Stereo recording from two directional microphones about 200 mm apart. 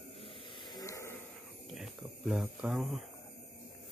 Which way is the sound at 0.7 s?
15° left (ahead or behind).